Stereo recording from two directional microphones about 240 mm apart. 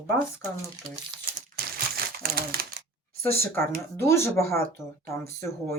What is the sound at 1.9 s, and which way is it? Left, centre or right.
Crumpling, right.